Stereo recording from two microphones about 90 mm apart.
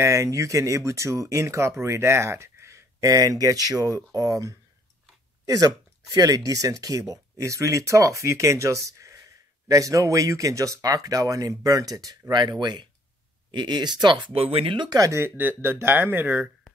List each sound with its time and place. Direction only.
0.0 s speech: 35° right (ahead or behind)
12.3 s speech: 50° right (ahead or behind); by 14.9 s 80° right
14.9 s speech: 35° right (ahead or behind); by 16.4 s 20° right (ahead or behind)